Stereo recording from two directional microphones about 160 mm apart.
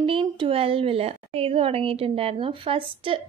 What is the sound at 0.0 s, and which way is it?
A woman's voice, 35° right (ahead or behind).